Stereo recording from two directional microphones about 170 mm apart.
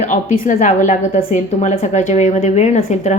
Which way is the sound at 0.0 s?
45° left (ahead or behind).